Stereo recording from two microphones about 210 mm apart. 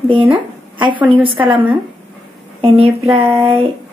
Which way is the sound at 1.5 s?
5° right (ahead or behind).